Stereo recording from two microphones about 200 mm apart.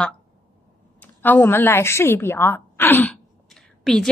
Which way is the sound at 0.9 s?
10° left (ahead or behind).